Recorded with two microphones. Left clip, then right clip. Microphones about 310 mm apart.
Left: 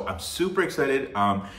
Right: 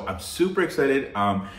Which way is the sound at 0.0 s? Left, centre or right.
Centre.